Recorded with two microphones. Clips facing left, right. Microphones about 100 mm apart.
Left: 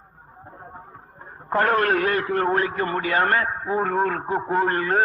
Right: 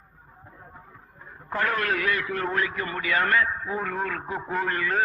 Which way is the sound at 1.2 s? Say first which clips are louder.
Left 6 dB; 45° left (ahead or behind).